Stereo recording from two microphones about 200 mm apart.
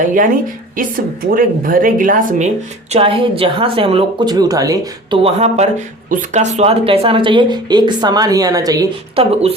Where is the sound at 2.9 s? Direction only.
30° right (ahead or behind).